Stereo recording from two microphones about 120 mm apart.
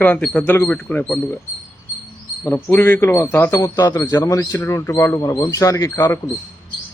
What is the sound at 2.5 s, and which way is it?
Speech, 15° left (ahead or behind).